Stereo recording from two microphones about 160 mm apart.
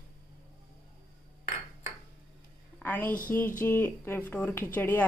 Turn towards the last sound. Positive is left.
turn(degrees=10)  # may be behind; listen again after turning